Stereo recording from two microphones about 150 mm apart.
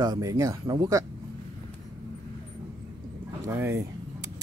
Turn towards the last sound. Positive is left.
turn(degrees=-15)  # may be behind; listen again after turning